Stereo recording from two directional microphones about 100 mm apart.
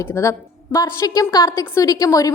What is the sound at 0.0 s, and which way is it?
A woman's voice, 25° left (ahead or behind).